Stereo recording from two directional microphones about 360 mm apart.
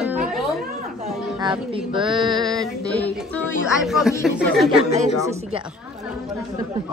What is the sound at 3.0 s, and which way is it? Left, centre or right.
Speech, centre.